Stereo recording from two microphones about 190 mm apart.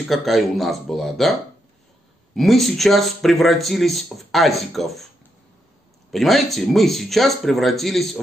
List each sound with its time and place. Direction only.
0.1 s speech: centre (ahead or behind)
2.3 s speech: centre (ahead or behind)
6.1 s speech: centre (ahead or behind)